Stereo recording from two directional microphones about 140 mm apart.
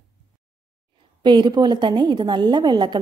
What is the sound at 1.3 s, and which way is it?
A woman's voice, 30° right (ahead or behind).